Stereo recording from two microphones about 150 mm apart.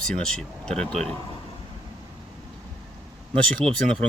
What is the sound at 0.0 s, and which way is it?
Speech, 5° left (ahead or behind).